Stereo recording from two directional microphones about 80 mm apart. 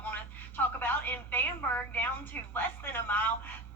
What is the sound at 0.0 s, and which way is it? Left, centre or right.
Telephone, left.